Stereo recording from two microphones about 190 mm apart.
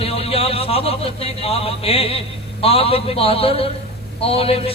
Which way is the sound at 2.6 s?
30° left (ahead or behind).